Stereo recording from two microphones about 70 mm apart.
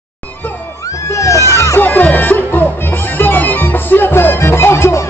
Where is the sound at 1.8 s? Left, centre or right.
Left.